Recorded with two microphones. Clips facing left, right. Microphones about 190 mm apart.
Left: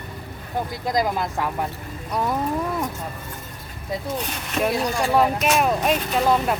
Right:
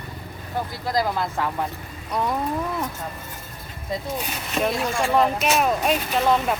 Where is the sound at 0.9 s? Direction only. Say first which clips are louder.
Left 1 dB; 20° left (ahead or behind).